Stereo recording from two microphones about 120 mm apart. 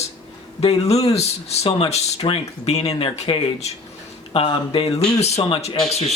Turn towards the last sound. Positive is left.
turn(degrees=60)  # may be behind; listen again after turning